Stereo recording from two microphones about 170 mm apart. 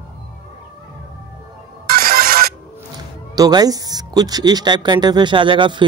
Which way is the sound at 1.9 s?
60° right (ahead or behind).